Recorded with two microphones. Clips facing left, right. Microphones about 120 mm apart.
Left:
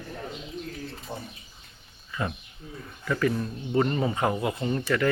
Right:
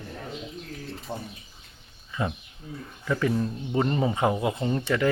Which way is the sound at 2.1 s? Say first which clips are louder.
Right 2 dB; 15° right (ahead or behind).